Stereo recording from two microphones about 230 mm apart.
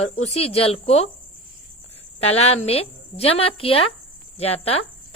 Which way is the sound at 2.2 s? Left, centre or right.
Left.